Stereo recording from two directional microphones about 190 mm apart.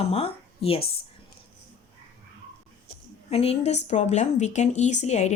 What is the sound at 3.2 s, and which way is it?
A woman's voice, 35° left (ahead or behind).